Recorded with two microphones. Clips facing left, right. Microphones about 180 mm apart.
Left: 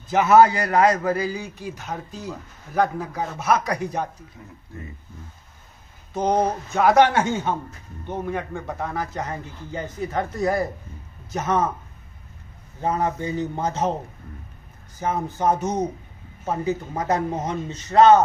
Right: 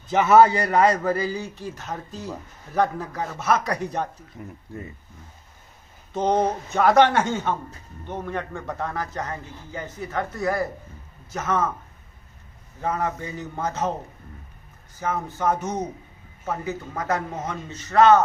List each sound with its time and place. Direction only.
0.1 s a man's voice: 5° left (ahead or behind)
1.9 s a man's voice: centre (ahead or behind)
6.3 s a man's voice: centre (ahead or behind); by 11.7 s 15° left (ahead or behind)
13.0 s speech: 25° left (ahead or behind)
13.6 s a man's voice: 15° left (ahead or behind)
15.0 s a man's voice: 15° left (ahead or behind)